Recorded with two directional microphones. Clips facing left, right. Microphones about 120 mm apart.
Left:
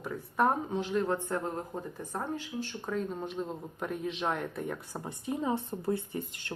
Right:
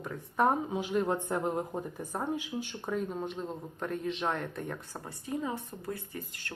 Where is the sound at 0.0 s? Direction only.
Centre (ahead or behind).